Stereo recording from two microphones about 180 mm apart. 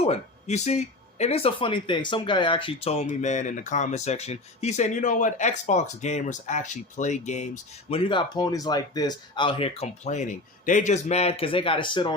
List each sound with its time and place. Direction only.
0.0 s speech: 35° left (ahead or behind)